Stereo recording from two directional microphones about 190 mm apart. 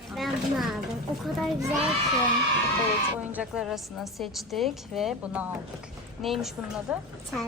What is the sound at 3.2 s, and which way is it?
A woman's voice, 5° right (ahead or behind).